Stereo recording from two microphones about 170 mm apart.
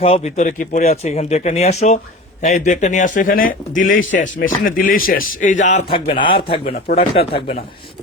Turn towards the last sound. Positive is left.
turn(degrees=35)  # may be behind; listen again after turning